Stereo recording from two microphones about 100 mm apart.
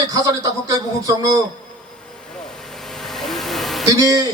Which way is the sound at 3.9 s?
35° right (ahead or behind).